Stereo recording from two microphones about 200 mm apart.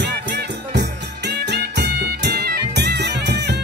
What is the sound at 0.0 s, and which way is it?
Music, 60° right (ahead or behind).